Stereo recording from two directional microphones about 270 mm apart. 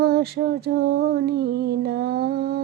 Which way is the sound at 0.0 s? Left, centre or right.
Right.